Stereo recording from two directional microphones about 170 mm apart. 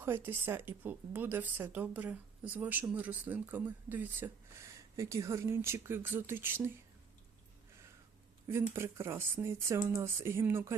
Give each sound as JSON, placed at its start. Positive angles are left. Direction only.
{"t": 0.0, "sound": "speech", "side_deg": -15}
{"t": 8.4, "sound": "speech", "side_deg": -15}